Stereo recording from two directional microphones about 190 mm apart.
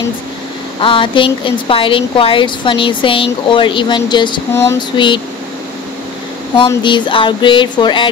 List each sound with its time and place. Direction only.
0.7 s speech: 25° left (ahead or behind)
6.7 s speech: 25° left (ahead or behind)